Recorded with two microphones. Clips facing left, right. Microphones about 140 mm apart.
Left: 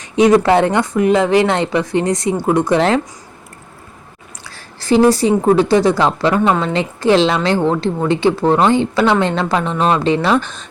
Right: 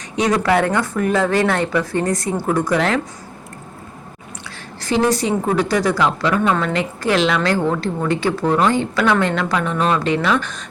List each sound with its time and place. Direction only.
0.3 s a woman's voice: 25° left (ahead or behind)
4.4 s a sound: 30° left (ahead or behind)
5.5 s a woman's voice: 25° left (ahead or behind)